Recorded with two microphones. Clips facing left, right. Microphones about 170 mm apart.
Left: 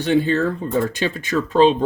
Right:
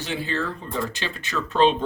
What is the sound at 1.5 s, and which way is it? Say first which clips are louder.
Speech: left 5 dB; 35° left (ahead or behind).